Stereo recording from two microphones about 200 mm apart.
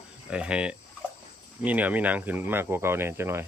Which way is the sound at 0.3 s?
5° right (ahead or behind).